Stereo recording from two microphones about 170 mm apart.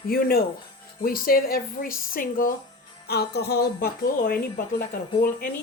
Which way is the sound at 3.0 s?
70° left (ahead or behind).